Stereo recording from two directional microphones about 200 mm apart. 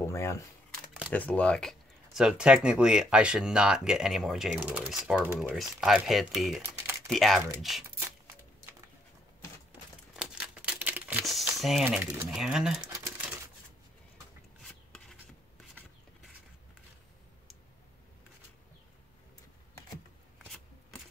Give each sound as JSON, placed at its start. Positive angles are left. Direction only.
{"t": 0.0, "sound": "camera", "side_deg": 15}
{"t": 1.1, "sound": "speech", "side_deg": 5}
{"t": 10.1, "sound": "crumpling", "side_deg": -5}